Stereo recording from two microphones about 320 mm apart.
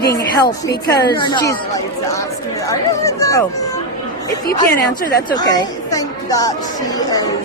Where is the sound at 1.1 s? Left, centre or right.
Centre.